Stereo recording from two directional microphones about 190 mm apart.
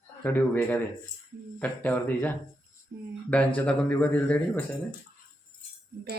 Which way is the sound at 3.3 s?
5° left (ahead or behind).